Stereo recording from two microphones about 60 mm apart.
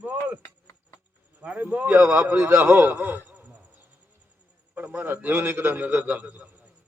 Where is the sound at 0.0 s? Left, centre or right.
Right.